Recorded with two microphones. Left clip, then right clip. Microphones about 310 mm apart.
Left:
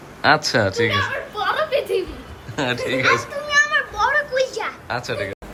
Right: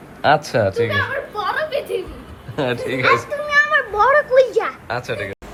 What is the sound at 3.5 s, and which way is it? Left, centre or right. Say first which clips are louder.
Children playing: right 2 dB; right.